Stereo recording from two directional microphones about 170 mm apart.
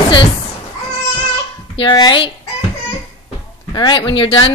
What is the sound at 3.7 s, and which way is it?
Speech, 30° left (ahead or behind).